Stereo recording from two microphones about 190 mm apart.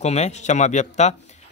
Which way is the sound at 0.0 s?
35° left (ahead or behind).